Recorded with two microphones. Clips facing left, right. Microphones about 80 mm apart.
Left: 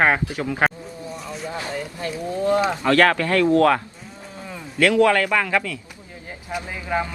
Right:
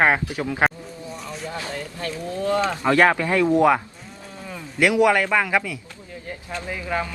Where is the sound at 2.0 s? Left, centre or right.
Centre.